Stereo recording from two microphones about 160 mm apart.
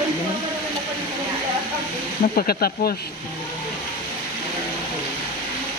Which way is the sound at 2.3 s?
70° left (ahead or behind).